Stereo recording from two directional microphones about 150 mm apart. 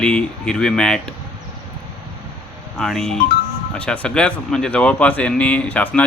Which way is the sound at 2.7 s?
5° left (ahead or behind).